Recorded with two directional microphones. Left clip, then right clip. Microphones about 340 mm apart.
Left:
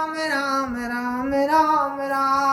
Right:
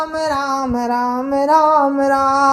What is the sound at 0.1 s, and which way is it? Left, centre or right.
A woman's voice, centre.